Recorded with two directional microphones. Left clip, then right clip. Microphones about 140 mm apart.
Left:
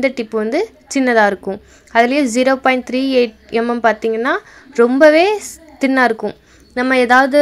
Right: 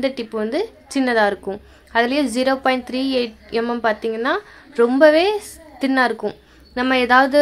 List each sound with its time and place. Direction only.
0.0 s a woman's voice: 30° left (ahead or behind)